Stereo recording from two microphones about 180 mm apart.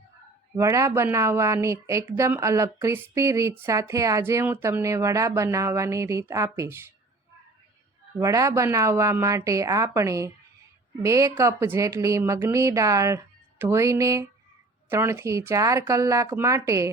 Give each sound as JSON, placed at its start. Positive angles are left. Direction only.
{"t": 0.5, "sound": "speech", "side_deg": -15}
{"t": 8.2, "sound": "speech", "side_deg": -20}